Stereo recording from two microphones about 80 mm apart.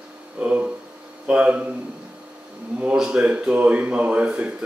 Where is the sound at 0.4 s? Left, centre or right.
Right.